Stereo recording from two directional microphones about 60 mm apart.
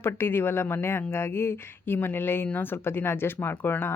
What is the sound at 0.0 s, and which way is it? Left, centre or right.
Speech, left.